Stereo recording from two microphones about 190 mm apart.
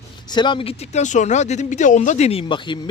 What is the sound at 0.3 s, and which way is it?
Speech, 25° left (ahead or behind).